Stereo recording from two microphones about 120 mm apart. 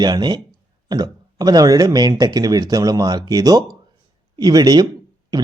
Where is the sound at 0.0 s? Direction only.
35° right (ahead or behind).